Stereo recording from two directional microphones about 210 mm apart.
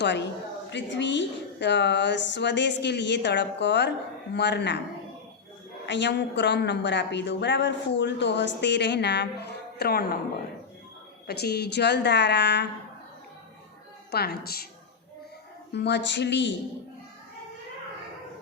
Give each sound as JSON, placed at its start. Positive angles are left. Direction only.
{"t": 0.0, "sound": "a woman's voice", "side_deg": 55}
{"t": 5.8, "sound": "a woman's voice", "side_deg": 55}
{"t": 11.3, "sound": "a woman's voice", "side_deg": 50}
{"t": 14.1, "sound": "a woman's voice", "side_deg": 50}
{"t": 15.7, "sound": "a woman's voice", "side_deg": 55}